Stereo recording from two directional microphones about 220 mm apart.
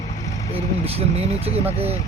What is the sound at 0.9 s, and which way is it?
Speech, 30° right (ahead or behind).